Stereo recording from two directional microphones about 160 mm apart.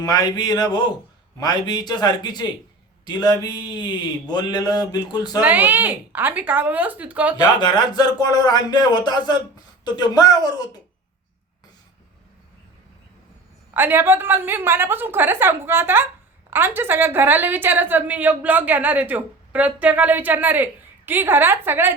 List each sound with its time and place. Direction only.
0.0 s mantra: 25° left (ahead or behind)
5.4 s a woman's voice: 10° right (ahead or behind)
7.3 s mantra: 25° left (ahead or behind)
13.7 s a woman's voice: 15° right (ahead or behind)